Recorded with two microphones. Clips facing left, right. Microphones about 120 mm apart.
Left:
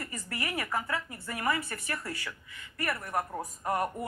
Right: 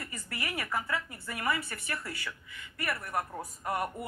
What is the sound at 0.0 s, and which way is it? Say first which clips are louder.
Speech: left 2 dB; 25° left (ahead or behind).